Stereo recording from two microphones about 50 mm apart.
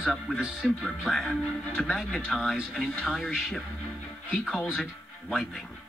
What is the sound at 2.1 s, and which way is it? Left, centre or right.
Speech, centre.